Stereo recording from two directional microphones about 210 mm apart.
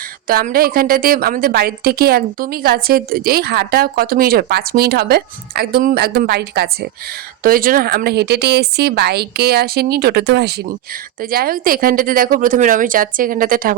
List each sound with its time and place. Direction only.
0.3 s a woman's voice: 45° right (ahead or behind)